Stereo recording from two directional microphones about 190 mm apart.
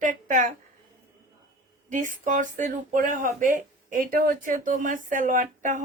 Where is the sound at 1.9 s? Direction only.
40° right (ahead or behind).